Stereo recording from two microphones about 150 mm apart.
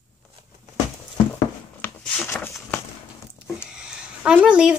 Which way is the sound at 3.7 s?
5° right (ahead or behind).